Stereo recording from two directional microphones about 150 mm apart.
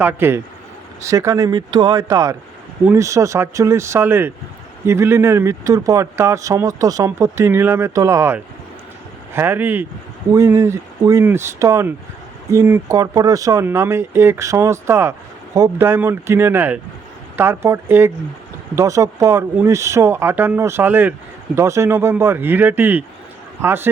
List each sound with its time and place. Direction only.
0.0 s speech: 15° right (ahead or behind)